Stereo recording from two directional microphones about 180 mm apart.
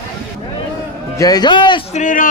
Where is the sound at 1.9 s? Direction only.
45° left (ahead or behind).